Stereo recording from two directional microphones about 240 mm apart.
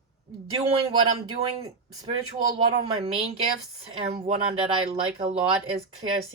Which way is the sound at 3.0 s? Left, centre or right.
Right.